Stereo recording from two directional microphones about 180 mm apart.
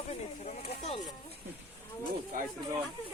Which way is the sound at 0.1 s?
35° left (ahead or behind).